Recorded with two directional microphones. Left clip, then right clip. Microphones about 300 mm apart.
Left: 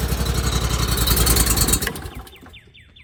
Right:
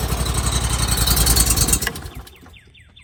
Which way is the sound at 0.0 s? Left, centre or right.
Right.